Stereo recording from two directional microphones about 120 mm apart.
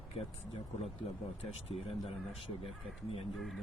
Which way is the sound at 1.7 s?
55° left (ahead or behind).